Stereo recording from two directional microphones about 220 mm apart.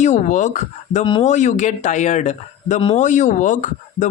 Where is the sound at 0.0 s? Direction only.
35° left (ahead or behind).